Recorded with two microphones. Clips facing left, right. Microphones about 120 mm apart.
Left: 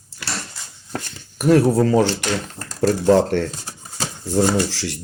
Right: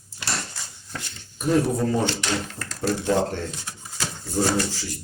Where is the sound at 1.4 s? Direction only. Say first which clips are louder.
Left 7 dB; 75° left (ahead or behind).